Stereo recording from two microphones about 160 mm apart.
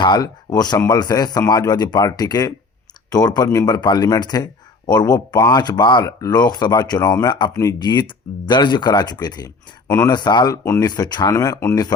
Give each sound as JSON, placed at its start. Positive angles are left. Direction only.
{"t": 0.0, "sound": "speech", "side_deg": 25}
{"t": 10.2, "sound": "speech", "side_deg": 25}